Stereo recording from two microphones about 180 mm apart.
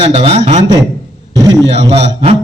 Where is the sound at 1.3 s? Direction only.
20° right (ahead or behind).